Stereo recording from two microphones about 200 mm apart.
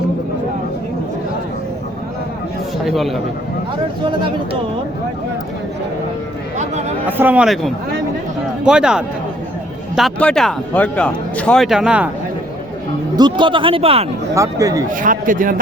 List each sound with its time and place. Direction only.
2.8 s speech: centre (ahead or behind)
7.1 s speech: 10° right (ahead or behind)
13.1 s speech: 20° right (ahead or behind)
14.3 s speech: 15° right (ahead or behind)
15.0 s a man's voice: 40° right (ahead or behind)